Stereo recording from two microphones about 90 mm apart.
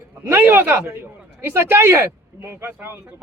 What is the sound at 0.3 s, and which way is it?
Speech, 20° right (ahead or behind).